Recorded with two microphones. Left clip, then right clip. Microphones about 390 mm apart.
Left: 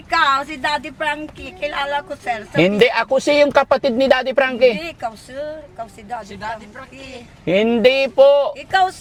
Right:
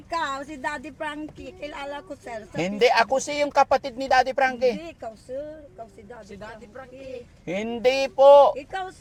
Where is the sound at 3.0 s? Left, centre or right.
Left.